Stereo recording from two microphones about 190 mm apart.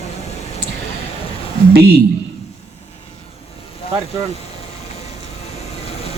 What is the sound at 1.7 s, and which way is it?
Speech, 55° right (ahead or behind).